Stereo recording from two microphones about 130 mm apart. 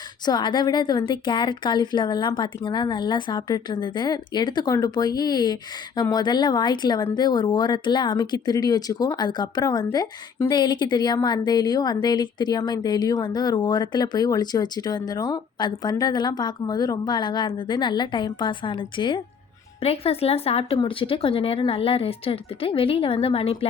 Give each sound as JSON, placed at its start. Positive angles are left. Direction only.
{"t": 0.3, "sound": "speech", "side_deg": 35}
{"t": 19.8, "sound": "a woman's voice", "side_deg": 50}